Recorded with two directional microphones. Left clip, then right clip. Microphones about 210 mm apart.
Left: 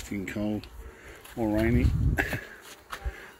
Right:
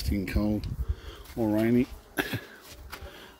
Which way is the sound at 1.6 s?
20° right (ahead or behind).